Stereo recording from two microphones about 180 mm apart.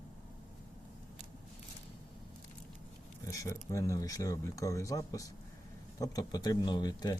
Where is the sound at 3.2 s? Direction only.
15° left (ahead or behind).